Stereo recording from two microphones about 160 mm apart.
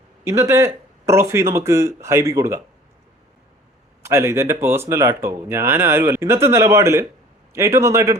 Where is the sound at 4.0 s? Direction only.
15° right (ahead or behind).